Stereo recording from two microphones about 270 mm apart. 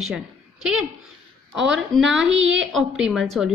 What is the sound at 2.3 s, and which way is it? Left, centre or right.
Speech, right.